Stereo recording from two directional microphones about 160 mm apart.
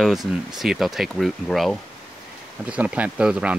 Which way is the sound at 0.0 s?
Centre (ahead or behind).